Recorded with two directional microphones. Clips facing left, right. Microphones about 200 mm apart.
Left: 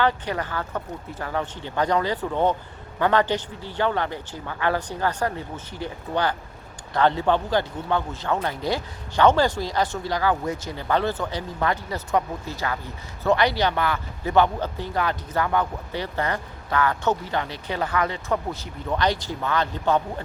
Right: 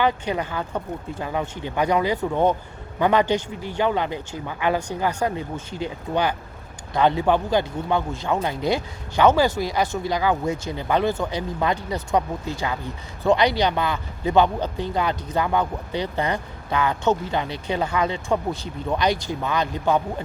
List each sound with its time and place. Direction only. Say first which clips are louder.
0.0 s speech: right 1 dB; 15° right (ahead or behind)